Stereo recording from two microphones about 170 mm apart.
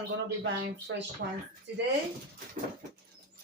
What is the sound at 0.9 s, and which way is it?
Speech, 90° right.